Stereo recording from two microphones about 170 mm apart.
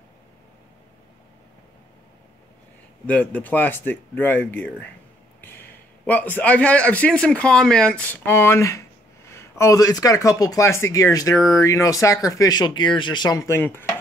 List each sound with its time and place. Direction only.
3.1 s a man's voice: 10° left (ahead or behind)